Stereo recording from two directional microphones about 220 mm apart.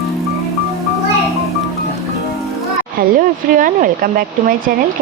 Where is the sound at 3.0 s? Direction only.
45° right (ahead or behind).